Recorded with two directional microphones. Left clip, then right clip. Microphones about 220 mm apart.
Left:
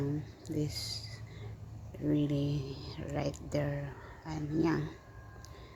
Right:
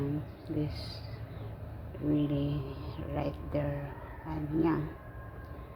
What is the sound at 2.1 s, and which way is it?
Speech, 50° left (ahead or behind).